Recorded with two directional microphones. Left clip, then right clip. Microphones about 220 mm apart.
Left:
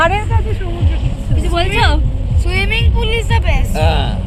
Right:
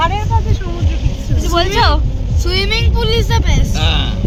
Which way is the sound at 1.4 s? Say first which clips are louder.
Right 2 dB; 30° right (ahead or behind).